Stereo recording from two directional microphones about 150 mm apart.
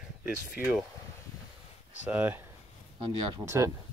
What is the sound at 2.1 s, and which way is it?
Speech, 10° right (ahead or behind).